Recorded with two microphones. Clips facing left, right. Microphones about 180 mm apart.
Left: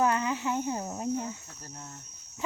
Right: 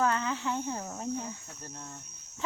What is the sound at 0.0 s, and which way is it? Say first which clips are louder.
Cricket: left 2 dB; 15° left (ahead or behind).